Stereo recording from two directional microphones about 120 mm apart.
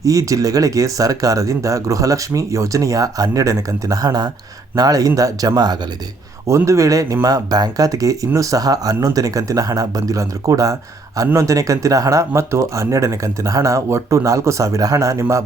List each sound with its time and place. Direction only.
0.0 s speech: 25° right (ahead or behind)